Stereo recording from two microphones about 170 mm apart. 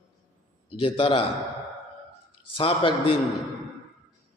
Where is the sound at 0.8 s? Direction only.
30° left (ahead or behind).